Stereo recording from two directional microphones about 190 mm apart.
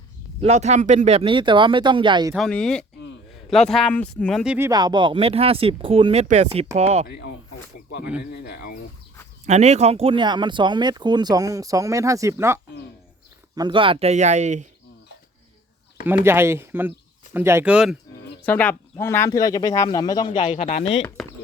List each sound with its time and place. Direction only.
0.4 s speech: 35° right (ahead or behind)
2.3 s speech: 5° left (ahead or behind)
4.5 s speech: 15° right (ahead or behind); by 7.1 s 35° right (ahead or behind)
7.1 s speech: 60° left (ahead or behind)
9.5 s speech: 35° right (ahead or behind); by 12.5 s 15° right (ahead or behind)
13.6 s speech: 25° right (ahead or behind)
16.0 s speech: 10° right (ahead or behind)
18.4 s speech: 10° left (ahead or behind)
20.4 s speech: 35° left (ahead or behind)